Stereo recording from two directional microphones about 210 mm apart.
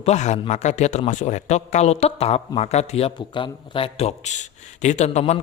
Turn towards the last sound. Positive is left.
turn(degrees=30)  # may be behind; listen again after turning